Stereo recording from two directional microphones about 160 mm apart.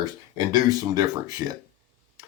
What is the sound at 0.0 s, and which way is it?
Speech, 25° right (ahead or behind).